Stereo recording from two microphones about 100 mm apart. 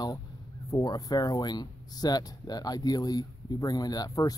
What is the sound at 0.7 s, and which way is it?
Speech, 40° left (ahead or behind).